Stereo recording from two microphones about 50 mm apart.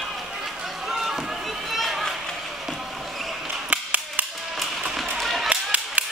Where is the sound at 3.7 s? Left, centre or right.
Right.